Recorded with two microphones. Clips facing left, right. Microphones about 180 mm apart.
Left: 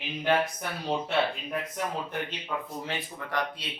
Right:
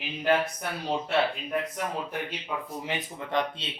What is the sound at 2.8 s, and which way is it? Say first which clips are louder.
Speech: right 2 dB; 20° right (ahead or behind).